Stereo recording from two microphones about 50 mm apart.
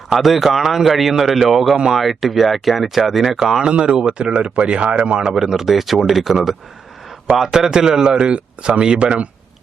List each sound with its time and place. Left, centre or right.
0.1 s a man's voice: centre; by 5.1 s right
5.2 s a man's voice: centre